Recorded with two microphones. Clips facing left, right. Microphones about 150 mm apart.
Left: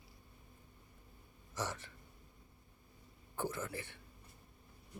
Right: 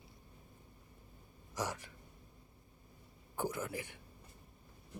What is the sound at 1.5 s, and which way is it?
Speech, 15° right (ahead or behind).